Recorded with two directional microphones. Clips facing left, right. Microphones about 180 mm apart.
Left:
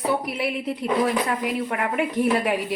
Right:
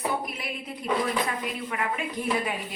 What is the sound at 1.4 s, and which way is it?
A woman's voice, 60° left (ahead or behind).